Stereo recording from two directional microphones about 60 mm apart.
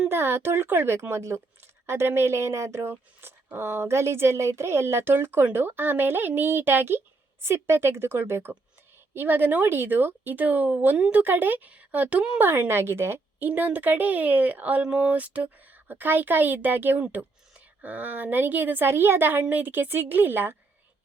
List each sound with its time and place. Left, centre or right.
0.1 s a woman's voice: right
12.4 s speech: right
13.4 s a woman's voice: right